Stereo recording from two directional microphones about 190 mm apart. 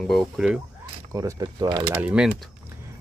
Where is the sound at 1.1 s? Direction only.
20° right (ahead or behind).